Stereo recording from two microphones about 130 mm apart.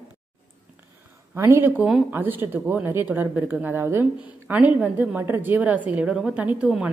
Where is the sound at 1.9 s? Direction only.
5° right (ahead or behind).